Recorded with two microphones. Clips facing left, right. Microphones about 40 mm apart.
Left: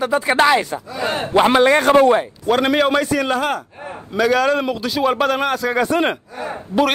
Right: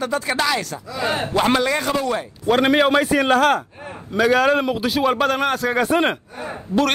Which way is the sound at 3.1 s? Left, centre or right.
Right.